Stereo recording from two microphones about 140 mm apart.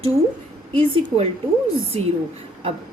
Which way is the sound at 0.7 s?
40° right (ahead or behind).